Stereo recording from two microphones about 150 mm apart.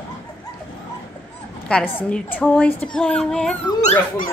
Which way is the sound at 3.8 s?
50° left (ahead or behind).